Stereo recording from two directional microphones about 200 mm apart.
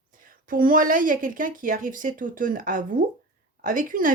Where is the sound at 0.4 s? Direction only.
45° right (ahead or behind).